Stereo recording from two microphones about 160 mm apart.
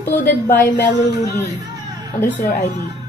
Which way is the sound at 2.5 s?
45° left (ahead or behind).